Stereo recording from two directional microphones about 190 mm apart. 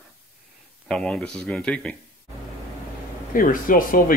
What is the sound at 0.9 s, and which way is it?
Speech, 5° left (ahead or behind).